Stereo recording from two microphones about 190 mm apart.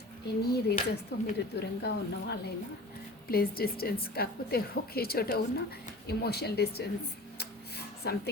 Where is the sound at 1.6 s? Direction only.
60° left (ahead or behind).